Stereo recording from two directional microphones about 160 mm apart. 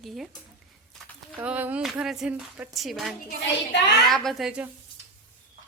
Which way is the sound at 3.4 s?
90° left.